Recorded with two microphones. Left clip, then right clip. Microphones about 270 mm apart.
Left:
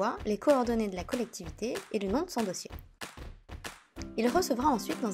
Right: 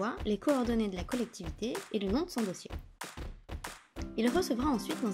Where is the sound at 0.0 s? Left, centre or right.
Centre.